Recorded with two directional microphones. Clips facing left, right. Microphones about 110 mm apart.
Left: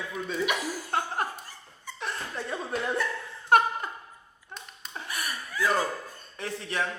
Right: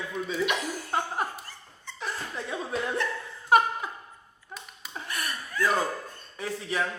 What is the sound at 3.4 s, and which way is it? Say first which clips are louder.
Laughter: even; centre (ahead or behind).